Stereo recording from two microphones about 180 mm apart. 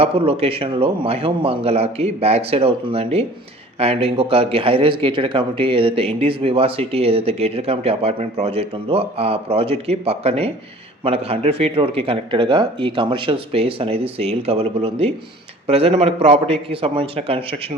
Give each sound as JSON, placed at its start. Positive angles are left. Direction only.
{"t": 0.0, "sound": "speech", "side_deg": -30}